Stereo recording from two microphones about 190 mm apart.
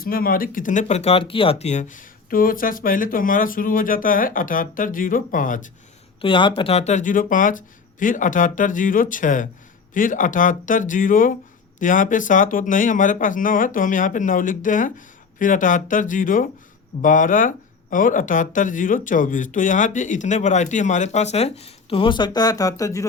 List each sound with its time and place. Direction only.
0.0 s speech: 50° left (ahead or behind)
6.2 s speech: 25° left (ahead or behind)